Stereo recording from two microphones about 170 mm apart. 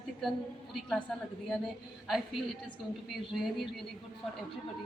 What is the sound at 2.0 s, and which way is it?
A woman's voice, centre (ahead or behind).